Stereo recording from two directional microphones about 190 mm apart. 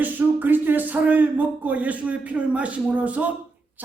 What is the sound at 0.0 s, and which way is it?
Speech, 10° right (ahead or behind).